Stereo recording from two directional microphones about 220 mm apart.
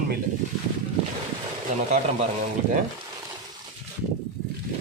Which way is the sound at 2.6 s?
35° right (ahead or behind).